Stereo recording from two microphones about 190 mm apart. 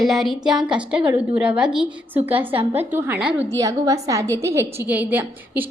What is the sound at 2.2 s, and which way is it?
Speech, 30° right (ahead or behind).